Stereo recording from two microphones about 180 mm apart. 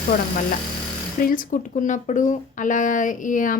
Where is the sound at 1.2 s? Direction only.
45° left (ahead or behind).